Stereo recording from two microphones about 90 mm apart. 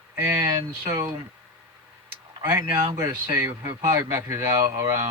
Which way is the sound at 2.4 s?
35° right (ahead or behind).